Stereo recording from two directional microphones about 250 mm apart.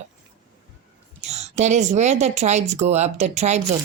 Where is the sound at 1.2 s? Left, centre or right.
Right.